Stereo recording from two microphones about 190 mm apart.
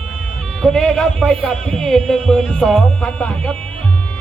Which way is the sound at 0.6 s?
5° left (ahead or behind).